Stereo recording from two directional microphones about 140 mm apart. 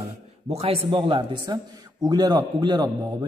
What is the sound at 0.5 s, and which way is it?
A man's voice, 45° right (ahead or behind).